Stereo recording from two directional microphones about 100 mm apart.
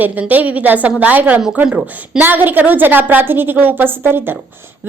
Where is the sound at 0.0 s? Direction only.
15° right (ahead or behind).